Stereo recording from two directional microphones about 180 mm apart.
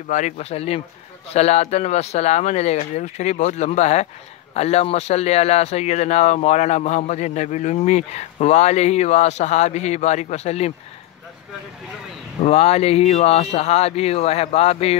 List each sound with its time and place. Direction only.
0.1 s speech: 40° left (ahead or behind)
12.4 s speech: 35° left (ahead or behind)